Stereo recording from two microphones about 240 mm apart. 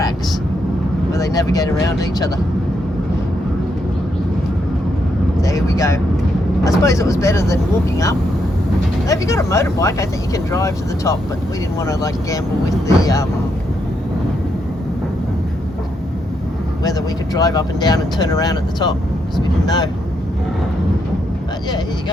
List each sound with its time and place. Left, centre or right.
1.1 s speech: centre
5.4 s speech: centre
17.3 s speech: centre